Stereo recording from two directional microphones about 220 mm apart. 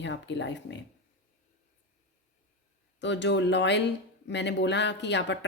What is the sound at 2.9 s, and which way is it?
Speech, 55° left (ahead or behind).